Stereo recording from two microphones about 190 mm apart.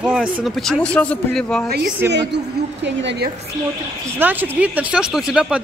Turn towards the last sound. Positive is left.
turn(degrees=-5)  # may be behind; listen again after turning